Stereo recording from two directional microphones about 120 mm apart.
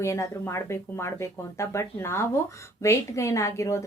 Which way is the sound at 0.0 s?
25° left (ahead or behind).